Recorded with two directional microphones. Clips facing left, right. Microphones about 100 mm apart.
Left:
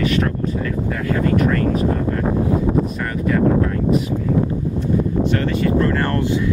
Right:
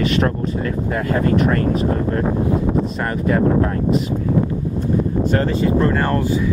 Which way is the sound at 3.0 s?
40° right (ahead or behind).